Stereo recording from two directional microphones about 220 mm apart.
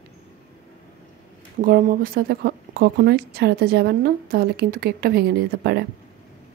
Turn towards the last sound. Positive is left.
turn(degrees=-45)  # may be behind; listen again after turning